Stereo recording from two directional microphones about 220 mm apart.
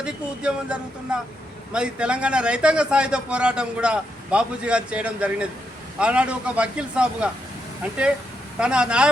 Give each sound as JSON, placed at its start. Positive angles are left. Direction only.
{"t": 0.0, "sound": "a man's voice", "side_deg": -5}
{"t": 8.5, "sound": "a man's voice", "side_deg": -5}